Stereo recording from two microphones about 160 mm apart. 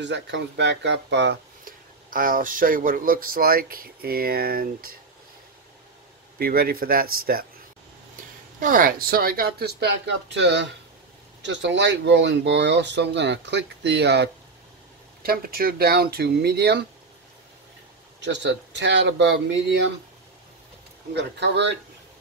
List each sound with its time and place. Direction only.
0.0 s speech: 90° right; by 4.9 s 70° right (ahead or behind)
6.3 s speech: 70° right (ahead or behind)
8.5 s speech: 60° right (ahead or behind); by 14.3 s 90° right
15.2 s speech: 65° right (ahead or behind); by 16.8 s 90° right
18.2 s speech: 90° right
21.1 s speech: 90° right